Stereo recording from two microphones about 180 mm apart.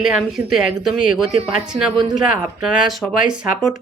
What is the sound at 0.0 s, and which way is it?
Speech, 5° right (ahead or behind).